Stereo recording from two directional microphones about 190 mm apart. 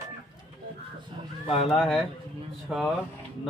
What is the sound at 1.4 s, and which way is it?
Speech, 30° left (ahead or behind).